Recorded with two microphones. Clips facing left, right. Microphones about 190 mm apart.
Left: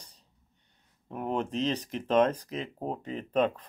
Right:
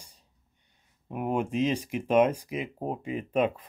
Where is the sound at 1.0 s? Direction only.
10° right (ahead or behind).